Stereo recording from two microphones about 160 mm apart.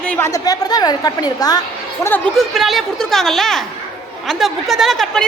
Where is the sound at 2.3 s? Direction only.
Centre (ahead or behind).